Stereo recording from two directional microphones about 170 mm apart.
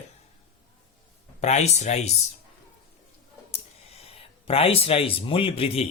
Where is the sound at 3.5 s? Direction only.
35° left (ahead or behind).